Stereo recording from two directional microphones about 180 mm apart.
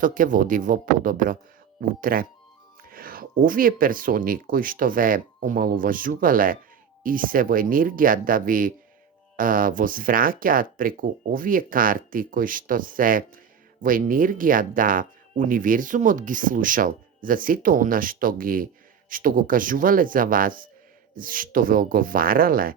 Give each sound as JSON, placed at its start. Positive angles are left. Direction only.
{"t": 0.0, "sound": "speech", "side_deg": -50}